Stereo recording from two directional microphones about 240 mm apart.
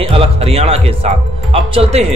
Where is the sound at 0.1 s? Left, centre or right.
Right.